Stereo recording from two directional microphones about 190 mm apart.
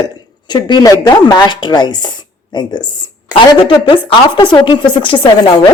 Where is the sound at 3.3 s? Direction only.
25° left (ahead or behind).